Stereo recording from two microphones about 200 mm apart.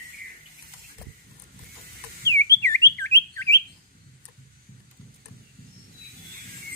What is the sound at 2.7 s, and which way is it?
Bird, 15° left (ahead or behind).